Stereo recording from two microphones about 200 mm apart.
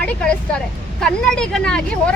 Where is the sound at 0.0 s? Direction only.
5° left (ahead or behind).